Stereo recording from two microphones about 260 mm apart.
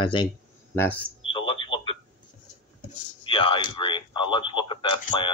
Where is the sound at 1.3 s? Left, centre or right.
Centre.